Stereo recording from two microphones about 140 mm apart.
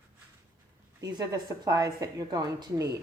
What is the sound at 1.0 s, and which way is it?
Speech, 30° right (ahead or behind).